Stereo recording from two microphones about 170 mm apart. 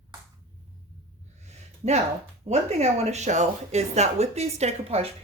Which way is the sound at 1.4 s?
40° right (ahead or behind).